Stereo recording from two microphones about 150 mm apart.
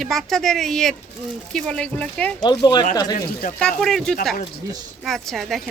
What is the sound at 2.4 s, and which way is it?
Speech, 30° left (ahead or behind).